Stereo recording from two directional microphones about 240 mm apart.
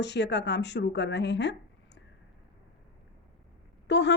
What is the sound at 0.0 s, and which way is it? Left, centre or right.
A woman's voice, left.